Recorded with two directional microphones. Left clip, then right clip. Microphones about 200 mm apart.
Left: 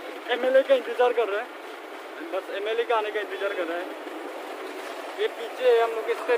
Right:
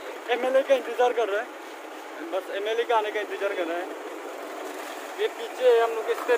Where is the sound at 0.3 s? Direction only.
Centre (ahead or behind).